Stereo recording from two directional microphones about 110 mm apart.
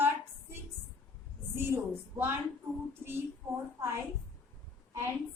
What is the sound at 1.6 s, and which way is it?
Speech, 20° right (ahead or behind).